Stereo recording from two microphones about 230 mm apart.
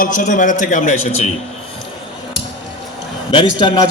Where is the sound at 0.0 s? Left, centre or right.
Left.